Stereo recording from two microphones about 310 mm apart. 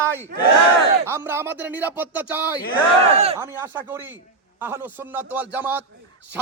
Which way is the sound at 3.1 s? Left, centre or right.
Centre.